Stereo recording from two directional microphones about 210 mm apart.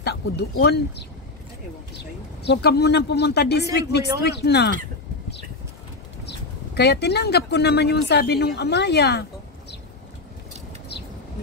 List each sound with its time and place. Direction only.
0.0 s speech: 50° left (ahead or behind)
2.4 s speech: 55° left (ahead or behind)
6.2 s speech: 50° left (ahead or behind)